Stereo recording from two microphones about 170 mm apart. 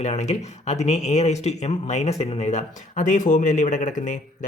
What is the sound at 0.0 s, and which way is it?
Speech, 40° left (ahead or behind).